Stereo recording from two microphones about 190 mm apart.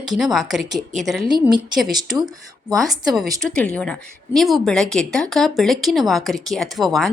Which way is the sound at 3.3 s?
5° left (ahead or behind).